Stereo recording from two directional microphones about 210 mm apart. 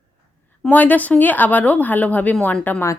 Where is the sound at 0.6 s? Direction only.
10° left (ahead or behind).